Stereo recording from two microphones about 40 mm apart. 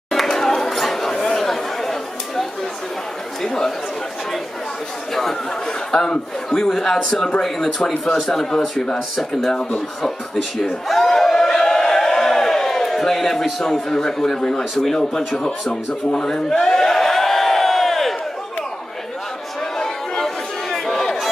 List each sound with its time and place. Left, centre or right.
0.1 s chatter: centre
3.4 s speech: centre
5.9 s speech: centre
10.6 s a sound: centre
14.8 s speech: centre
16.6 s crowd: centre
20.7 s a sound: centre